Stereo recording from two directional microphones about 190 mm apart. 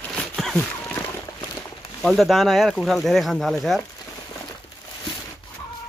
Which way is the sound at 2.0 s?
Centre (ahead or behind).